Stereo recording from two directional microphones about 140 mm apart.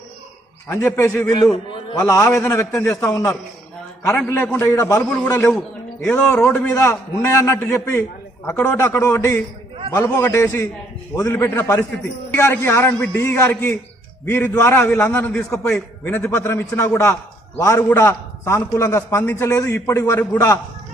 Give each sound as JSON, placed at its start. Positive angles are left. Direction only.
{"t": 0.7, "sound": "a man's voice", "side_deg": 15}
{"t": 1.3, "sound": "a man's voice", "side_deg": 30}
{"t": 4.0, "sound": "a man's voice", "side_deg": 5}
{"t": 5.0, "sound": "a man's voice", "side_deg": 5}
{"t": 5.3, "sound": "a man's voice", "side_deg": 25}
{"t": 6.1, "sound": "a man's voice", "side_deg": 10}